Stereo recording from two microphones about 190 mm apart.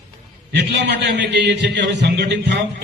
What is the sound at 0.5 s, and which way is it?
A man's voice, 65° right (ahead or behind).